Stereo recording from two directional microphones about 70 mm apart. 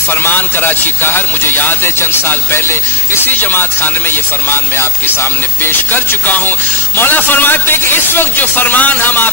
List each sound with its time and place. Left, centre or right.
0.1 s a man's voice: left
6.2 s a man's voice: left